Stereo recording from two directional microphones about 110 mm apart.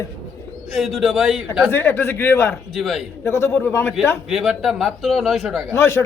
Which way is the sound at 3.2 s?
25° left (ahead or behind).